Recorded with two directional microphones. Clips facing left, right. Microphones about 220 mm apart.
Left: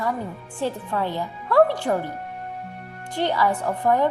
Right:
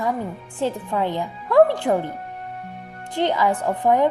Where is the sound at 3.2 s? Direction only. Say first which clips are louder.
Right 2 dB; 20° right (ahead or behind).